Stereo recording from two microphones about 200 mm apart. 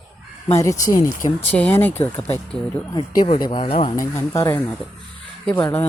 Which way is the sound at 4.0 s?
15° left (ahead or behind).